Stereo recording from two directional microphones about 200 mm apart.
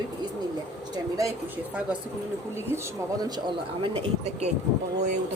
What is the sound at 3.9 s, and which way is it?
Speech, 35° right (ahead or behind).